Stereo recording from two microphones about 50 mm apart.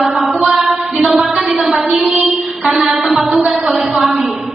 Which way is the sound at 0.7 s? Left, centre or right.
Right.